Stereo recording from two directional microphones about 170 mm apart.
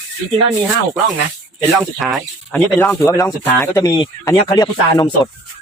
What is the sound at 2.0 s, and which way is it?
Speech, centre (ahead or behind).